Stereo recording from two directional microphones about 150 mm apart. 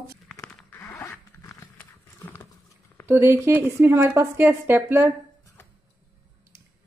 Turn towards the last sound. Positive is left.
turn(degrees=-15)  # may be behind; listen again after turning